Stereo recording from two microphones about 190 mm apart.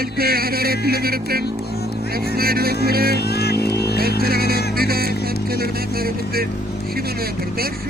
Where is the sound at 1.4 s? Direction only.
55° left (ahead or behind).